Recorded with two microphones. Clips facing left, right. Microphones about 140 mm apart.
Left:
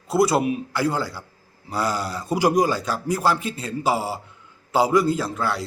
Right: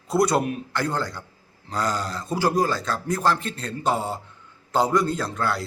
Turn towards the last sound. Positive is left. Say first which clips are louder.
# left 2 dB
turn(degrees=0)  # may be behind; listen again after turning